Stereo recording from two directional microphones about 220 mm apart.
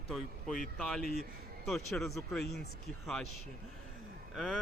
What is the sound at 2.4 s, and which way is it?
Speech, 50° left (ahead or behind).